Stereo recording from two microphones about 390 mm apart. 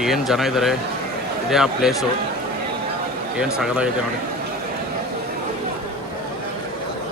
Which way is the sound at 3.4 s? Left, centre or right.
Centre.